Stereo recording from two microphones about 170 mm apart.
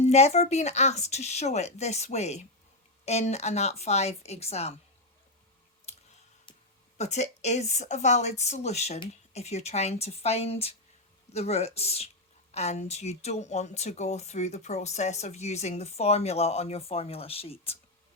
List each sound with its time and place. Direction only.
0.0 s speech: 40° left (ahead or behind)
6.9 s speech: 40° left (ahead or behind)